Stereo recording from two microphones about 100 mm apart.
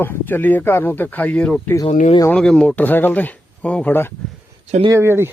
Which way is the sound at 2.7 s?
20° left (ahead or behind).